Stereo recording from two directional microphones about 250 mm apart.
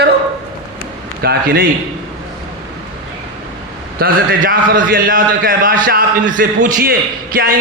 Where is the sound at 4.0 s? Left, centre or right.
Right.